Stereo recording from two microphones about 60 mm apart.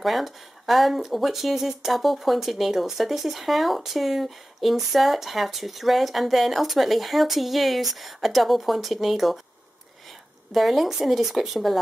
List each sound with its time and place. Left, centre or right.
0.0 s speech: centre
10.5 s speech: centre